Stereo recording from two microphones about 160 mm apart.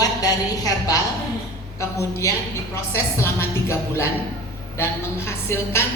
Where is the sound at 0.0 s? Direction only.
20° left (ahead or behind).